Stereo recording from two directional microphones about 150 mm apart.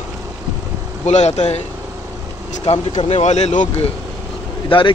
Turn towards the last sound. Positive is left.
turn(degrees=35)  # may be behind; listen again after turning